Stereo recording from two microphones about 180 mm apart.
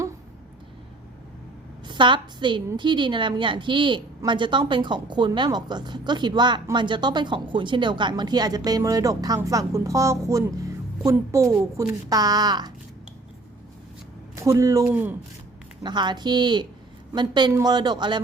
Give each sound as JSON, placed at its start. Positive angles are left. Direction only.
{"t": 1.9, "sound": "a woman's voice", "side_deg": -25}
{"t": 14.3, "sound": "speech", "side_deg": -15}
{"t": 15.8, "sound": "a woman's voice", "side_deg": -25}